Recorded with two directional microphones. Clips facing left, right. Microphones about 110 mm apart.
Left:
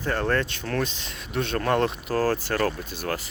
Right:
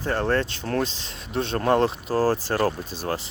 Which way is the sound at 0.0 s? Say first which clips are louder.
Right 1 dB; 30° right (ahead or behind).